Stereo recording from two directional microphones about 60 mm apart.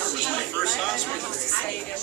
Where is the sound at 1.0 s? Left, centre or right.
Centre.